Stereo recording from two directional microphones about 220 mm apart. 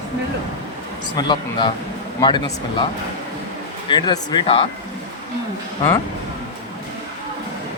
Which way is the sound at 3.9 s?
20° left (ahead or behind).